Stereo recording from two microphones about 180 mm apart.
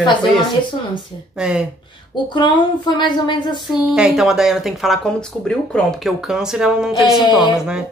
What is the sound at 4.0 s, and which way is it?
Speech, 5° right (ahead or behind).